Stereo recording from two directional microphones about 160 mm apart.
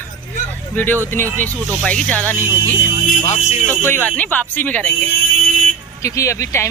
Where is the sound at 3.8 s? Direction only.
10° left (ahead or behind).